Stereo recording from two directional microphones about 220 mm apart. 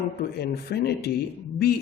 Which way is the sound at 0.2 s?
45° left (ahead or behind).